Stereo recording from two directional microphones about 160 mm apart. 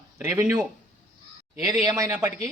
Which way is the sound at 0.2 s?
15° right (ahead or behind).